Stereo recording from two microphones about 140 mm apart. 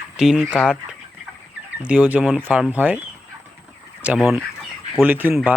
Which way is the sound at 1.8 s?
10° right (ahead or behind).